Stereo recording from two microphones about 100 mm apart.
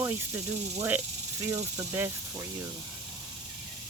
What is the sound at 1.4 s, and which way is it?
Speech, 30° right (ahead or behind).